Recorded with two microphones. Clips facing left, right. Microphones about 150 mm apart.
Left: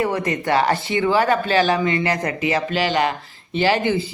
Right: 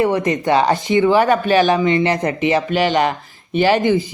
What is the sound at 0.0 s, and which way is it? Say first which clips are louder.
Speech: right 5 dB; 20° right (ahead or behind).